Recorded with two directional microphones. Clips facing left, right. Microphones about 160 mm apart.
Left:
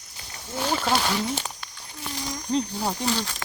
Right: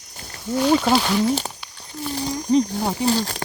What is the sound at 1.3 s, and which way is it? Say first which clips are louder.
Speech: right 8 dB; 35° right (ahead or behind).